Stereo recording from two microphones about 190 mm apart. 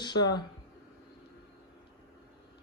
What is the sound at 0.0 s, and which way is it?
Speech, 20° left (ahead or behind).